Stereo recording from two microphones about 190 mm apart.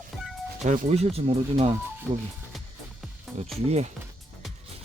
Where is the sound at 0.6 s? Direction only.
40° right (ahead or behind).